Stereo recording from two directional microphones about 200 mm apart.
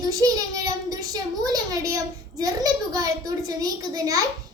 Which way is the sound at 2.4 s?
20° right (ahead or behind).